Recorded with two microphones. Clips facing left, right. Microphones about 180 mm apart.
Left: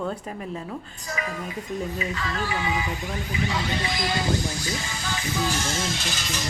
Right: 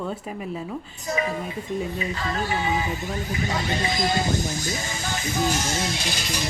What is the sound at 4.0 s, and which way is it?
Speech, 45° right (ahead or behind).